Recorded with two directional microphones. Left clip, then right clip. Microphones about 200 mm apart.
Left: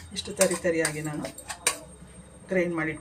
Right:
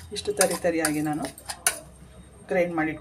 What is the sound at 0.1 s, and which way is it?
Speech, 30° right (ahead or behind).